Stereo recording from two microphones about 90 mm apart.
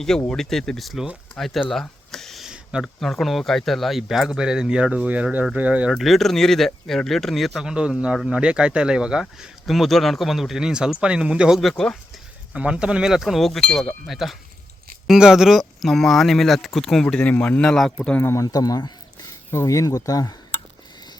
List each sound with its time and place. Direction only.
0.3 s speech: 5° left (ahead or behind)
1.7 s a sound: 5° left (ahead or behind)
3.0 s speech: centre (ahead or behind); by 6.0 s 15° right (ahead or behind)
6.0 s speech: centre (ahead or behind)
11.6 s a man's voice: 10° left (ahead or behind)
12.5 s a man's voice: 10° right (ahead or behind); by 18.2 s 10° left (ahead or behind)
18.2 s speech: 30° left (ahead or behind)
18.4 s a sound: 45° left (ahead or behind)
19.5 s speech: 35° left (ahead or behind)